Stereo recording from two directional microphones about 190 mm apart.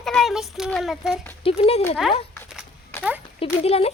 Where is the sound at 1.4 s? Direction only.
30° left (ahead or behind).